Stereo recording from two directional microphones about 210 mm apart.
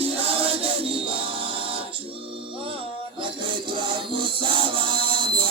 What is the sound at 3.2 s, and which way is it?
Music, 25° right (ahead or behind).